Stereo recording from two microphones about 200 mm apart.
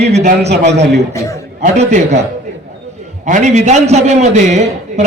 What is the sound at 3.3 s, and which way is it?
Speech, 35° right (ahead or behind).